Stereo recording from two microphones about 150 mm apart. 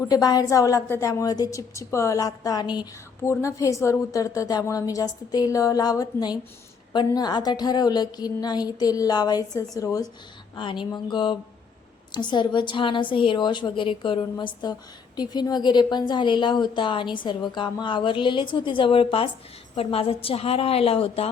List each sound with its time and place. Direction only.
0.1 s a woman's voice: 25° left (ahead or behind)